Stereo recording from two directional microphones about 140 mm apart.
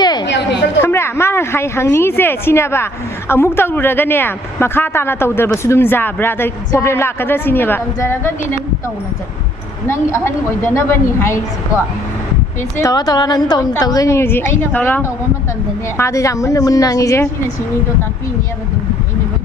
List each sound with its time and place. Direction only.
0.0 s chatter: 30° left (ahead or behind)
0.8 s a woman's voice: 15° left (ahead or behind)
9.8 s a woman's voice: 20° left (ahead or behind)
12.8 s a woman's voice: 25° left (ahead or behind)